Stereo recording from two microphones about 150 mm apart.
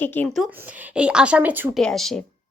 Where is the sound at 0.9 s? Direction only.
5° right (ahead or behind).